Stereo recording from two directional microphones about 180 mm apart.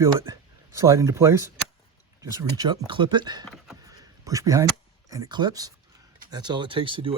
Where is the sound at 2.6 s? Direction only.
25° right (ahead or behind).